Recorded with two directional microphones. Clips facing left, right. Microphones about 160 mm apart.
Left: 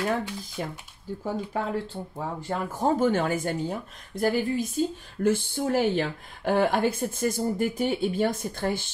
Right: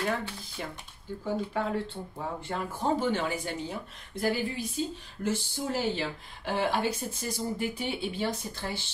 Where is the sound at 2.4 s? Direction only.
45° left (ahead or behind).